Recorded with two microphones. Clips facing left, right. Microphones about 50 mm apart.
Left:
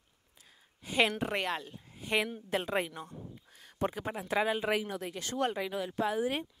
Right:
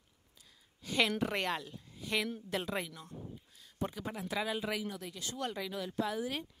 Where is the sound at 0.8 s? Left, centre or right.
Left.